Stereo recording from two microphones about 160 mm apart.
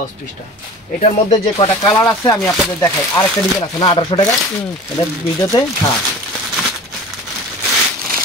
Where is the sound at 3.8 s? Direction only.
30° left (ahead or behind).